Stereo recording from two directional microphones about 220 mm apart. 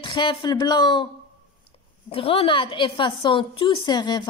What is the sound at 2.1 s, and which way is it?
Speech, 25° left (ahead or behind).